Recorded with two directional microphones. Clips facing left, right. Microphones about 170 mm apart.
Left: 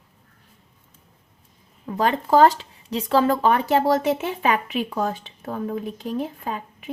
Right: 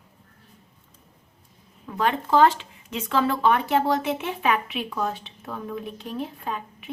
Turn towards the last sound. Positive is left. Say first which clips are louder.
# left 2 dB
turn(degrees=45)  # may be behind; listen again after turning